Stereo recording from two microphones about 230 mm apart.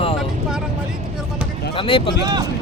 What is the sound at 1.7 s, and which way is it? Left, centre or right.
Speech, left.